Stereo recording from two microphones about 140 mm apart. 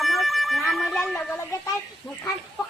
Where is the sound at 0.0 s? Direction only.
Centre (ahead or behind).